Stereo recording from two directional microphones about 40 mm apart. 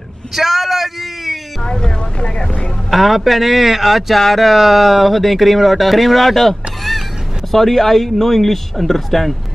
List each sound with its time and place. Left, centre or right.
0.3 s a sound: centre
1.6 s boat: centre
2.1 s speech: left
2.9 s speech: centre